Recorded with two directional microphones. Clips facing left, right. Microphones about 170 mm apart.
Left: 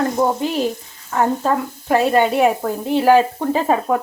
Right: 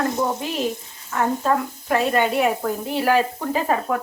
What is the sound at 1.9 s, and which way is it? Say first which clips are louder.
Speech: left 4 dB; 30° left (ahead or behind).